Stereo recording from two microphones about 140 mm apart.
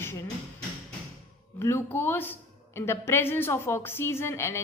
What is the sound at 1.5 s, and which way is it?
A woman's voice, 20° left (ahead or behind).